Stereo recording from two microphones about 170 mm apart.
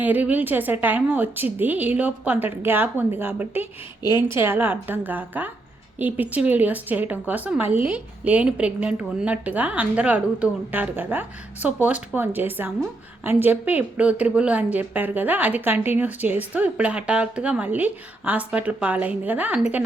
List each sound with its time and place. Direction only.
0.0 s a woman's voice: 10° right (ahead or behind)
4.0 s a woman's voice: 25° left (ahead or behind)
4.4 s a woman's voice: 10° right (ahead or behind)